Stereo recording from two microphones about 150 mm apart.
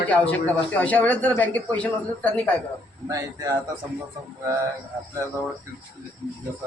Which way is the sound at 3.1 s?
20° right (ahead or behind).